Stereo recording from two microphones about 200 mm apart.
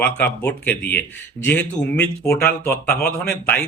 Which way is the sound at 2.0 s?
55° left (ahead or behind).